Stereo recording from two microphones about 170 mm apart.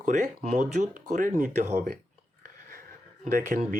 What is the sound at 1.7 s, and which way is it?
Speech, 60° right (ahead or behind).